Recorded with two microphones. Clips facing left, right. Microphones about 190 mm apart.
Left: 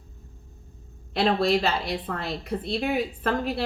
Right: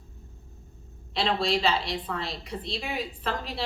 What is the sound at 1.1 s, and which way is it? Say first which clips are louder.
A woman's voice: left 4 dB; 55° left (ahead or behind).